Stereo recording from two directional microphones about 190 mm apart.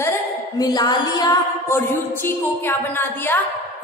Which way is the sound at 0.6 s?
20° left (ahead or behind).